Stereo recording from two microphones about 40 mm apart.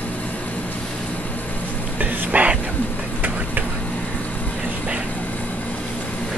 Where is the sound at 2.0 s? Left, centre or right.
Right.